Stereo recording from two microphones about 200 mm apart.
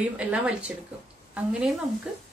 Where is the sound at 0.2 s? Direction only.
5° right (ahead or behind).